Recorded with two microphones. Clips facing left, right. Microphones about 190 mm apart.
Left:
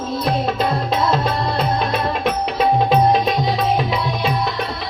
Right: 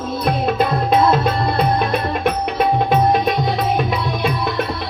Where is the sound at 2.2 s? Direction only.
55° right (ahead or behind).